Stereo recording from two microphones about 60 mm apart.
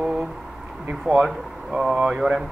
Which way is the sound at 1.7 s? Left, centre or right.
Centre.